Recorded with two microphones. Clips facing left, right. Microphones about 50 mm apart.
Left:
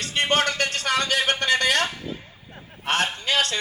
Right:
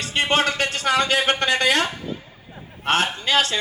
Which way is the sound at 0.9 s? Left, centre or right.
Right.